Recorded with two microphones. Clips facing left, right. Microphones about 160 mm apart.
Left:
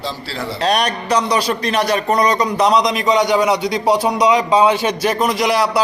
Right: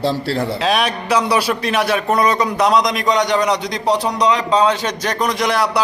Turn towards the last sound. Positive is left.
turn(degrees=0)  # may be behind; listen again after turning